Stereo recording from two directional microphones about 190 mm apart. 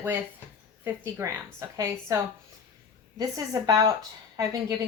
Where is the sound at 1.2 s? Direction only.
15° right (ahead or behind).